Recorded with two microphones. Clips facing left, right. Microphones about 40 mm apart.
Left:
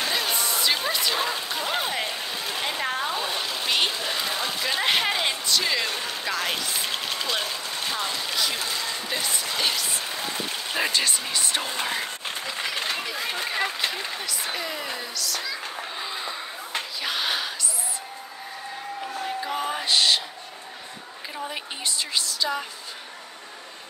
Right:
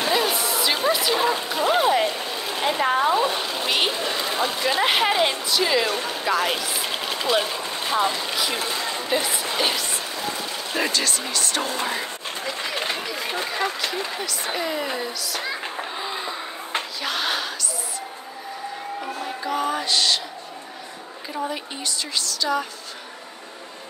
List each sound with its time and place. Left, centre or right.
0.0 s speech: centre
8.5 s speech: right
10.9 s speech: centre
11.8 s speech: centre
13.5 s speech: centre
14.5 s speech: centre
16.0 s a sound: centre
17.0 s gasp: centre
19.7 s a sound: centre
21.8 s speech: centre